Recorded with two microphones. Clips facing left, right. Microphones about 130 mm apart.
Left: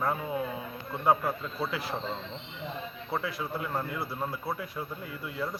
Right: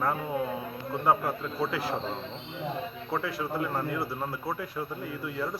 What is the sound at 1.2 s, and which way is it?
Speech, 10° right (ahead or behind).